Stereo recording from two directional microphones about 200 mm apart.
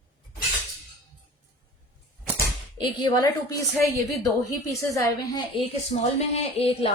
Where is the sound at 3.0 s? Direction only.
20° left (ahead or behind).